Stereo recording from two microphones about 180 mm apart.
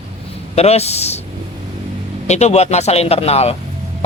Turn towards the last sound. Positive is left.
turn(degrees=35)  # may be behind; listen again after turning